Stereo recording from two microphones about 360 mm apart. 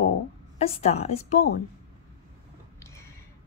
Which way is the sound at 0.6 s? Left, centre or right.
Centre.